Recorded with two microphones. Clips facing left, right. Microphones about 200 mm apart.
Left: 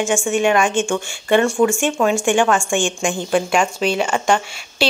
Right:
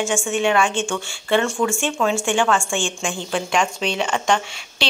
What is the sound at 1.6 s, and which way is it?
A woman's voice, 10° left (ahead or behind).